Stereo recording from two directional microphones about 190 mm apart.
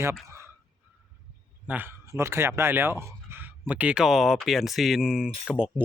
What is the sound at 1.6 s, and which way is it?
Speech, 10° right (ahead or behind).